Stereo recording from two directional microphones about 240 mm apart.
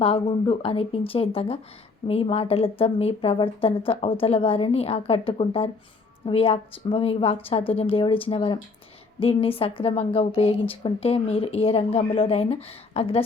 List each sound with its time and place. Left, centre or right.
0.0 s a woman's voice: left